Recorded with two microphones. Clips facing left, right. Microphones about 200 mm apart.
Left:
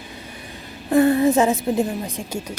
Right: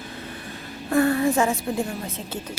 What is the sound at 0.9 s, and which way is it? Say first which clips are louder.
A woman's voice: left 4 dB; 20° left (ahead or behind).